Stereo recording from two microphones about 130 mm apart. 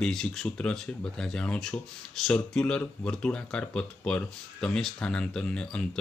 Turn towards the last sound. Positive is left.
turn(degrees=5)  # may be behind; listen again after turning